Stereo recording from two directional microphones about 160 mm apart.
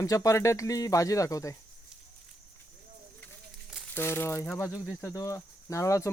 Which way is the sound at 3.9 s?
15° left (ahead or behind).